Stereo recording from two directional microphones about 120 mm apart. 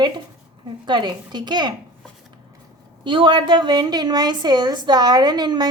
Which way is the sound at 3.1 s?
45° right (ahead or behind).